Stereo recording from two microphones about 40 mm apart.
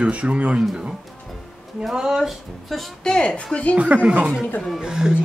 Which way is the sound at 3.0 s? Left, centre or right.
Centre.